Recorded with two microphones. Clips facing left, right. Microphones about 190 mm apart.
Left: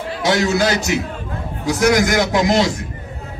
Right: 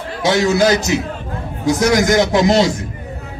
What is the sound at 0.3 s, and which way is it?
Speech, 20° right (ahead or behind).